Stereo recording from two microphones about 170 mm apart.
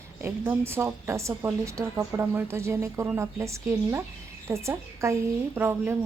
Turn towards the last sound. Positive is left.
turn(degrees=-15)  # may be behind; listen again after turning